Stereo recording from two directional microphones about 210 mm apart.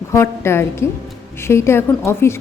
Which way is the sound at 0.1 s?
10° left (ahead or behind).